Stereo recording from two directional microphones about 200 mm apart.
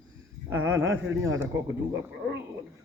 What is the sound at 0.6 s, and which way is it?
Speech, 85° right.